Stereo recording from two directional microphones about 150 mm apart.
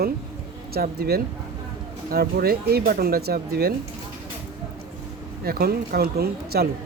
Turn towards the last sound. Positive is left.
turn(degrees=-90)